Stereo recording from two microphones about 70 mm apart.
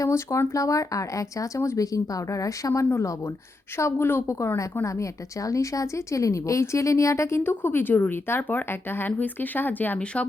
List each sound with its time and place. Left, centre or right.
0.1 s a woman's voice: left
0.5 s speech: left
3.8 s a woman's voice: left